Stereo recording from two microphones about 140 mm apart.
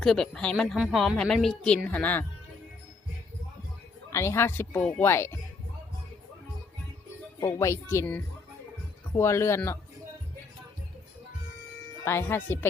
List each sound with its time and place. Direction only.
0.0 s a woman's voice: centre (ahead or behind)
4.1 s speech: 20° left (ahead or behind)
7.3 s speech: 20° left (ahead or behind)
12.0 s speech: 15° left (ahead or behind)